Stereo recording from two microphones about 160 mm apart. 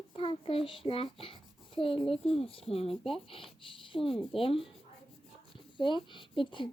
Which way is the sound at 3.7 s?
35° left (ahead or behind).